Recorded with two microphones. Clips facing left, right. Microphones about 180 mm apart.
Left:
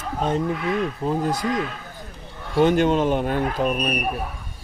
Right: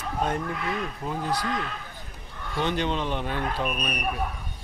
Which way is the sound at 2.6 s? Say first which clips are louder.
Left 9 dB; 45° left (ahead or behind).